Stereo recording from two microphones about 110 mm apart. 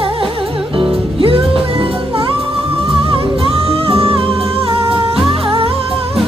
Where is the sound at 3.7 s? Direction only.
60° right (ahead or behind).